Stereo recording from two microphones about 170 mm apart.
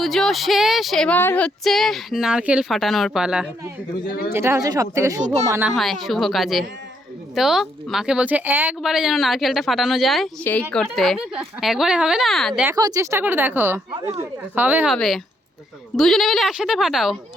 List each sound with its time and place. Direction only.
0.0 s speech: centre (ahead or behind)
4.0 s speech: 60° left (ahead or behind)
4.3 s a woman's voice: 15° right (ahead or behind)
5.2 s speech: 40° right (ahead or behind)
5.5 s a woman's voice: 10° right (ahead or behind)
5.7 s speech: centre (ahead or behind)
12.7 s a woman's voice: 20° right (ahead or behind)
14.9 s speech: centre (ahead or behind)